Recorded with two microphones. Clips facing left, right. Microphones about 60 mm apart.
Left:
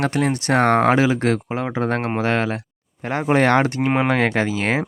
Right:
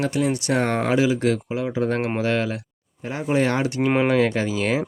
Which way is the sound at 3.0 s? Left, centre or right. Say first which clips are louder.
Left 4 dB; left.